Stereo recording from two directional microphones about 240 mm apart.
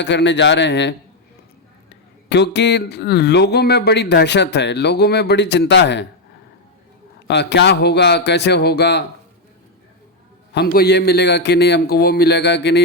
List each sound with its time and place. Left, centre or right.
0.0 s speech: left
2.3 s speech: left
7.3 s speech: left
10.5 s speech: left